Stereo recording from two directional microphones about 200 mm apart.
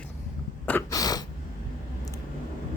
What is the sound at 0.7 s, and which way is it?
Sneeze, 15° left (ahead or behind).